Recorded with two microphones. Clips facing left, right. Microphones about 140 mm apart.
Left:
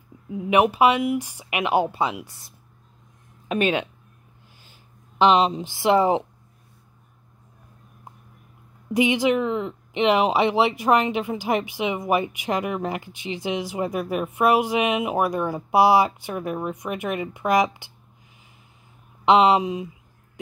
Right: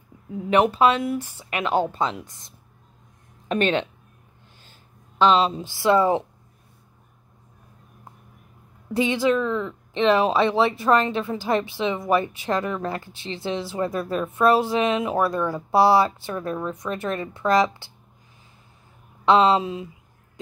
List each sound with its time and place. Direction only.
0.3 s speech: 15° left (ahead or behind)
5.2 s speech: 15° left (ahead or behind)
8.9 s speech: 15° left (ahead or behind)
19.2 s speech: 15° left (ahead or behind)